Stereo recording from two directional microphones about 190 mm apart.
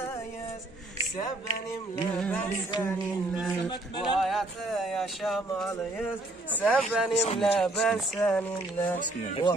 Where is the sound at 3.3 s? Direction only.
Centre (ahead or behind).